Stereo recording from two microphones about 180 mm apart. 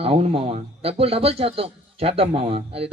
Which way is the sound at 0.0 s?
30° right (ahead or behind).